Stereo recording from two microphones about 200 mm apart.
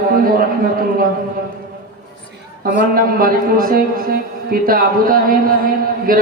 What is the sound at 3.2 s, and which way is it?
Speech, 45° right (ahead or behind).